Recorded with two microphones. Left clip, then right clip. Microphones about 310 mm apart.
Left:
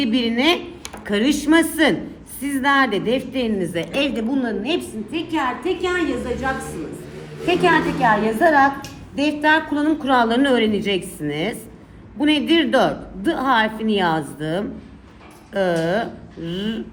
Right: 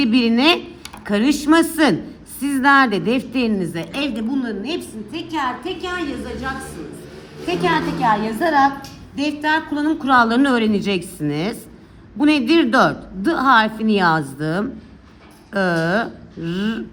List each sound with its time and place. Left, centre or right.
0.0 s a woman's voice: centre
15.7 s a woman's voice: centre